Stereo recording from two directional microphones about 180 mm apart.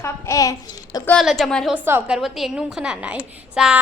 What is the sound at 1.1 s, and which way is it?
Speech, centre (ahead or behind).